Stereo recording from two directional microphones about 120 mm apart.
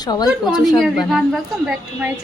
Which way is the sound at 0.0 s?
35° left (ahead or behind).